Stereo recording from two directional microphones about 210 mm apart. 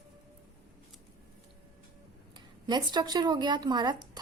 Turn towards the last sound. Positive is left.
turn(degrees=-20)  # may be behind; listen again after turning